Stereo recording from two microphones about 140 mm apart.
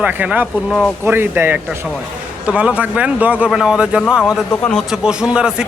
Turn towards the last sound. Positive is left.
turn(degrees=-5)  # may be behind; listen again after turning